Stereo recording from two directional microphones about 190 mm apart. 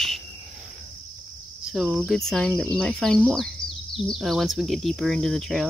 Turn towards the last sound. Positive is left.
turn(degrees=0)  # may be behind; listen again after turning